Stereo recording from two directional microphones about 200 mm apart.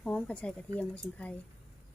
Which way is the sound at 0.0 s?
5° left (ahead or behind).